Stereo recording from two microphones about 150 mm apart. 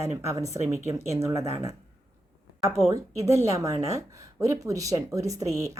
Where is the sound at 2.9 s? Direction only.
20° right (ahead or behind).